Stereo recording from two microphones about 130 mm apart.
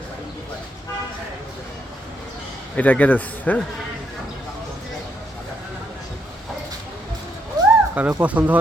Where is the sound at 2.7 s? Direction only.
10° left (ahead or behind).